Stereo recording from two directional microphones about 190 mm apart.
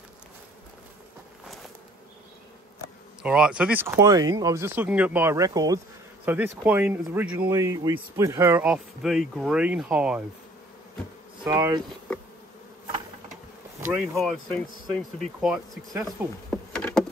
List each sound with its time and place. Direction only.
3.2 s speech: 5° right (ahead or behind)
11.4 s speech: 20° right (ahead or behind)
13.7 s speech: 10° right (ahead or behind)
14.2 s speech: centre (ahead or behind)
15.9 s speech: 15° right (ahead or behind)
16.4 s a sound: 5° left (ahead or behind)